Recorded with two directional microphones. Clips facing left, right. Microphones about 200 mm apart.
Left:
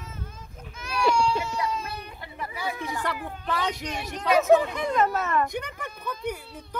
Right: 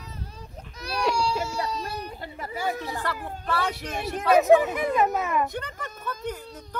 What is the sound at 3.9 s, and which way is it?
Speech, 50° right (ahead or behind).